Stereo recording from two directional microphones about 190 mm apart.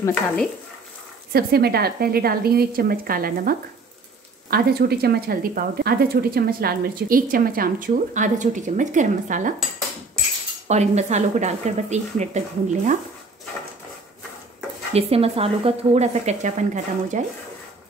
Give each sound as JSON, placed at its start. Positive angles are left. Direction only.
{"t": 0.0, "sound": "speech", "side_deg": 5}
{"t": 1.3, "sound": "speech", "side_deg": -55}
{"t": 10.7, "sound": "speech", "side_deg": -35}
{"t": 15.0, "sound": "speech", "side_deg": -30}